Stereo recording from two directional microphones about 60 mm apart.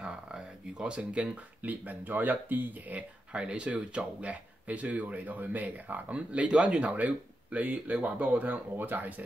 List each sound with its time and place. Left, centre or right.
0.0 s speech: centre; by 9.1 s right